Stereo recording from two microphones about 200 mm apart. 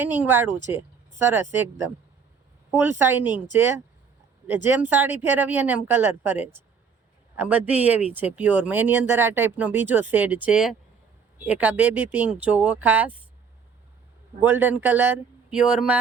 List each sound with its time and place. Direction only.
0.0 s speech: 10° right (ahead or behind)
2.6 s a woman's voice: 10° right (ahead or behind)
4.4 s speech: 10° right (ahead or behind)
14.4 s speech: 10° right (ahead or behind)